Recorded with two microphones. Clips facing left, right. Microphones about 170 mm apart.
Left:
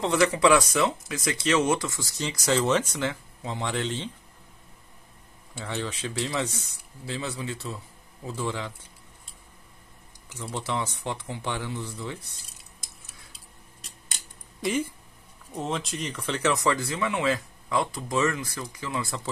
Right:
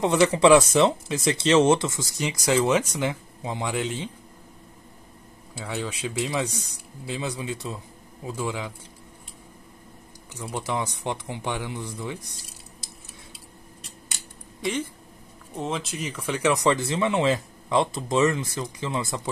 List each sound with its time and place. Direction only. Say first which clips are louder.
0.0 s speech: right 3 dB; 20° right (ahead or behind)
5.6 s speech: right 2 dB; 10° right (ahead or behind)
10.4 s speech: right 2 dB; 15° right (ahead or behind)
14.6 s speech: left 1 dB; 10° left (ahead or behind); by 19.2 s 20° right (ahead or behind)